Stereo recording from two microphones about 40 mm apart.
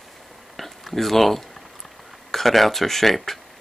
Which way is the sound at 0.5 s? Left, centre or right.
Centre.